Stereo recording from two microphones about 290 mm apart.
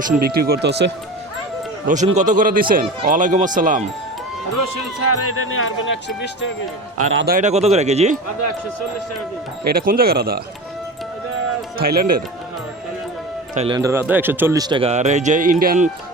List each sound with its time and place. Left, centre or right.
0.0 s speech: right
1.9 s speech: right
4.9 s speech: left
6.9 s speech: right
9.6 s speech: right
11.8 s speech: right
13.5 s speech: centre